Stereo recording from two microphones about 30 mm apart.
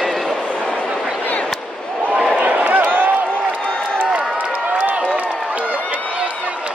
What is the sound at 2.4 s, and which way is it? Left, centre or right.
Run, right.